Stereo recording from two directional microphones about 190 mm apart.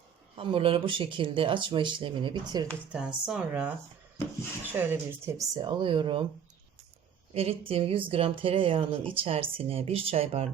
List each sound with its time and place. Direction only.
0.3 s speech: 30° right (ahead or behind)
2.9 s speech: 5° right (ahead or behind)
4.7 s a woman's voice: 10° right (ahead or behind)
5.6 s speech: 25° right (ahead or behind)
7.3 s speech: 30° right (ahead or behind)